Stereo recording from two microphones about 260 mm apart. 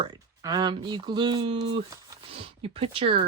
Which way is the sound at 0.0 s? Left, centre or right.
Centre.